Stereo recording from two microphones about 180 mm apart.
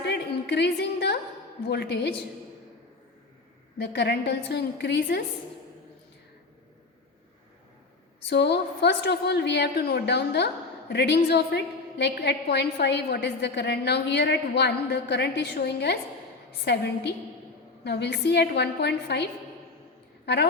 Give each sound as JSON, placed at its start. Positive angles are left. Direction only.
{"t": 0.0, "sound": "a sound", "side_deg": 70}
{"t": 1.6, "sound": "a woman's voice", "side_deg": 65}
{"t": 3.8, "sound": "a woman's voice", "side_deg": 70}
{"t": 8.3, "sound": "a woman's voice", "side_deg": 70}